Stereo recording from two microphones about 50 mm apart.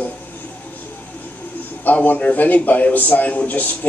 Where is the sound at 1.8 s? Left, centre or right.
Left.